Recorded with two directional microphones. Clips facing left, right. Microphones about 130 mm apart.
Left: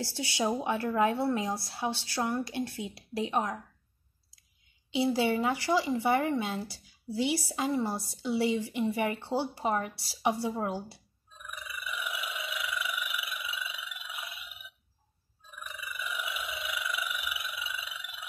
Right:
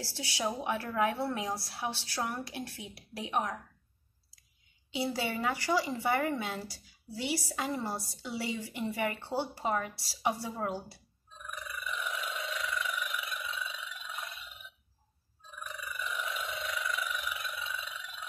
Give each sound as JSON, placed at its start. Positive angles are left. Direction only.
{"t": 0.0, "sound": "speech", "side_deg": 20}
{"t": 5.0, "sound": "speech", "side_deg": 20}
{"t": 11.8, "sound": "telephone bell ringing", "side_deg": 10}
{"t": 15.7, "sound": "a sound", "side_deg": 10}